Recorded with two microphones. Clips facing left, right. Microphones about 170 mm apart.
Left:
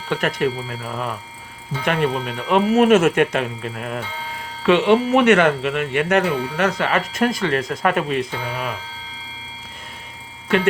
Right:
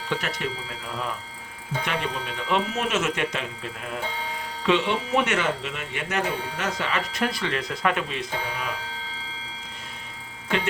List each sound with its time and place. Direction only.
0.1 s speech: 55° left (ahead or behind)